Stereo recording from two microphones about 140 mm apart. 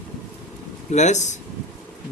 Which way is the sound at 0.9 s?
55° left (ahead or behind).